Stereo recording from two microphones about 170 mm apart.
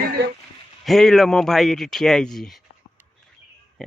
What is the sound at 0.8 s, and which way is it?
Speech, centre (ahead or behind).